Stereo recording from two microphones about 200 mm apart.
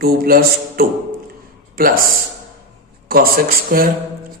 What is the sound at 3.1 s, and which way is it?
Speech, 50° right (ahead or behind).